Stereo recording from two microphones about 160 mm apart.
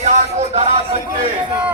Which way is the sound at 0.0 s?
45° right (ahead or behind).